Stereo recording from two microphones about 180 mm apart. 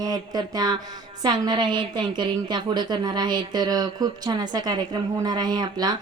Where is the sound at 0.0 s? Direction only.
20° right (ahead or behind).